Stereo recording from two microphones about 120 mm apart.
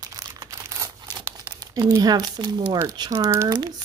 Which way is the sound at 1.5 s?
30° right (ahead or behind).